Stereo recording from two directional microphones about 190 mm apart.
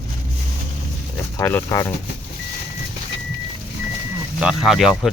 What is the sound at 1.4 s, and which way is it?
Speech, 10° left (ahead or behind).